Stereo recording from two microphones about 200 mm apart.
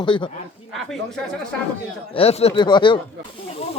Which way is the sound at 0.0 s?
25° left (ahead or behind).